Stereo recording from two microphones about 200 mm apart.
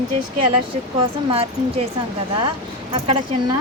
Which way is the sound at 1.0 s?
30° right (ahead or behind).